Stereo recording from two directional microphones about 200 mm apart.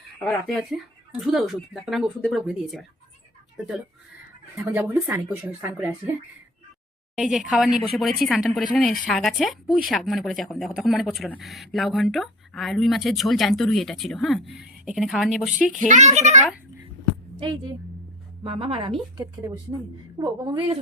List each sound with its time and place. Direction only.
0.3 s speech: 5° left (ahead or behind)
4.5 s speech: 10° right (ahead or behind)
7.2 s speech: centre (ahead or behind)
15.9 s a child's voice: 35° right (ahead or behind)
18.4 s a woman's voice: 30° right (ahead or behind)